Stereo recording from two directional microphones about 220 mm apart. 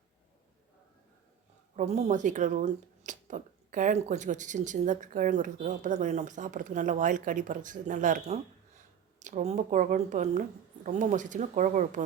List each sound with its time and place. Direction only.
1.7 s speech: 30° right (ahead or behind)